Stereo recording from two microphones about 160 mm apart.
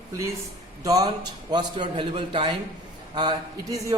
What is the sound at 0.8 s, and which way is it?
A man's voice, 20° right (ahead or behind).